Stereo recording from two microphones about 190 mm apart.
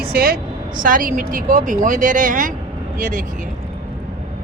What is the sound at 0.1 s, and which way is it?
Speech, 50° right (ahead or behind).